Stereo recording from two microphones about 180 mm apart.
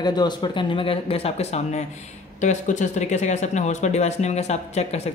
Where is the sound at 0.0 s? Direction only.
25° left (ahead or behind).